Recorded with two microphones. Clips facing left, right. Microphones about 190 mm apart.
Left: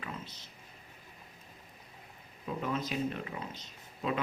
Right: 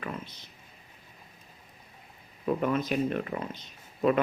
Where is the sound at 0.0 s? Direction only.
55° right (ahead or behind).